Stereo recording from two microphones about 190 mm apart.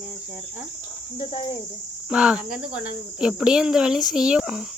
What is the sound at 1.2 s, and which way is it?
Cricket, 25° left (ahead or behind).